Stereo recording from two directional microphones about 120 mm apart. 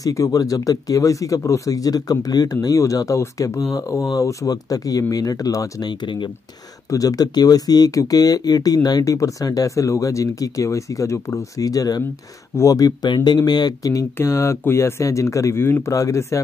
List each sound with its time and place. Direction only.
0.0 s speech: 30° left (ahead or behind)
6.9 s speech: 30° left (ahead or behind)